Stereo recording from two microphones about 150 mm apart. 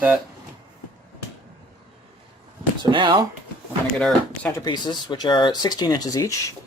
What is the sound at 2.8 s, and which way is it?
Speech, 30° right (ahead or behind).